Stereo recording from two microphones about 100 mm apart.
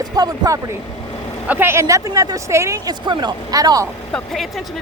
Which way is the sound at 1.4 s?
20° right (ahead or behind).